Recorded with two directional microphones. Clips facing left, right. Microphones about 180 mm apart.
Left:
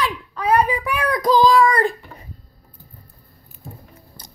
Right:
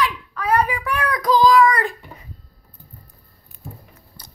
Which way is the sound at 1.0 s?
30° left (ahead or behind).